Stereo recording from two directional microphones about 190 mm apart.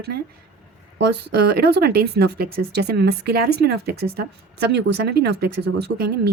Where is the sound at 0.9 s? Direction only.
60° right (ahead or behind).